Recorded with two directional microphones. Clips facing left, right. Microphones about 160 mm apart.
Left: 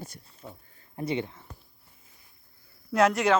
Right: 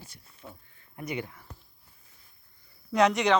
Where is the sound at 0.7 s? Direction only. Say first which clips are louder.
Left 5 dB; 30° left (ahead or behind).